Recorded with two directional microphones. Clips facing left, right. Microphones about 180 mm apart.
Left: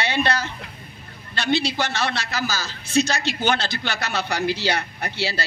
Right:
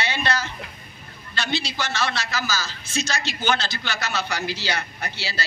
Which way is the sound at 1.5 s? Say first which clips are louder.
Left 4 dB; 60° left (ahead or behind).